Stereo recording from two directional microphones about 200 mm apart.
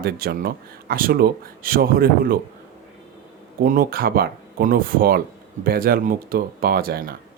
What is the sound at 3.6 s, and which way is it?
Speech, 45° right (ahead or behind).